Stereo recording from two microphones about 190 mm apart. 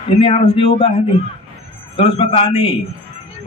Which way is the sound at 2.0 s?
30° left (ahead or behind).